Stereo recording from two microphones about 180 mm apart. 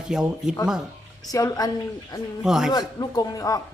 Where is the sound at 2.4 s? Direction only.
5° right (ahead or behind).